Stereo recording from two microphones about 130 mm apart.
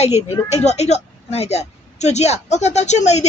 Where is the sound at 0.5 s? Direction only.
60° left (ahead or behind).